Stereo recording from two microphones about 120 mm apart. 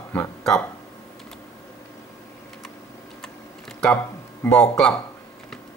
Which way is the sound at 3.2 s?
5° left (ahead or behind).